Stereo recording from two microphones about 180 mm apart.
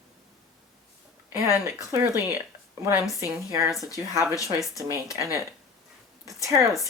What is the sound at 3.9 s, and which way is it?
Speech, 15° right (ahead or behind).